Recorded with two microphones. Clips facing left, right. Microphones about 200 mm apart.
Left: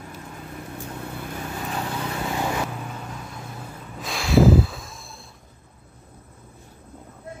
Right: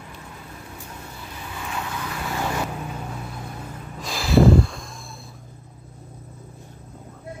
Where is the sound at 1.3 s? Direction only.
45° left (ahead or behind).